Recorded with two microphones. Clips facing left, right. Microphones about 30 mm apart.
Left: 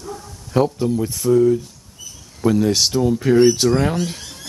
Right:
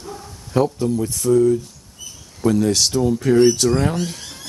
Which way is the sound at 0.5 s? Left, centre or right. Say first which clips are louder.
Left 1 dB; centre.